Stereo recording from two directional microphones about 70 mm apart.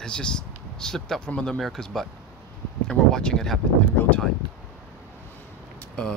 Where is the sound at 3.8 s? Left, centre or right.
Left.